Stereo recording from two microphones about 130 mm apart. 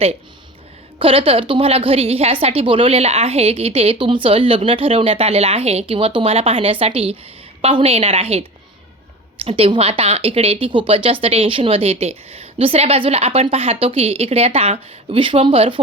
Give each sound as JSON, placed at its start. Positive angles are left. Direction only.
{"t": 0.9, "sound": "speech", "side_deg": -45}